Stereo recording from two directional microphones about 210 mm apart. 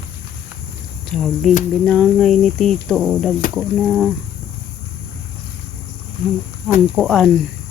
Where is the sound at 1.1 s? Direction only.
Centre (ahead or behind).